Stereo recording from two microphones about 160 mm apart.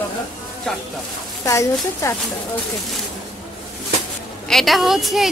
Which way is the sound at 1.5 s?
20° left (ahead or behind).